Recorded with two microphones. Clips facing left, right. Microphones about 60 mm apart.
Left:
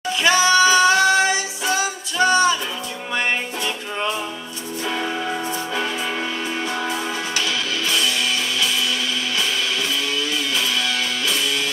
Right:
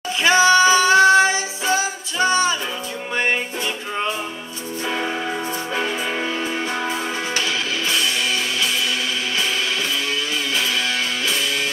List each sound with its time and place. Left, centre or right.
0.2 s female singing: right
3.2 s music: right
5.8 s music: right
10.5 s music: right